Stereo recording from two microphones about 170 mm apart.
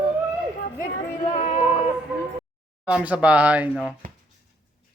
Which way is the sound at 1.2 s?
35° left (ahead or behind).